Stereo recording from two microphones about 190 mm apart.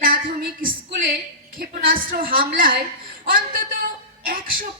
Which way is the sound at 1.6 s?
50° right (ahead or behind).